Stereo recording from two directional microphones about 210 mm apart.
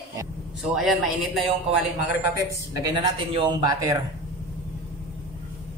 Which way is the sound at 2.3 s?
15° right (ahead or behind).